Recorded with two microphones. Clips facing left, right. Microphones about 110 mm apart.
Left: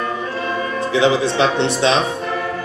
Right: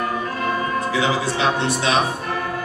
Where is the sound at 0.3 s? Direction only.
25° left (ahead or behind).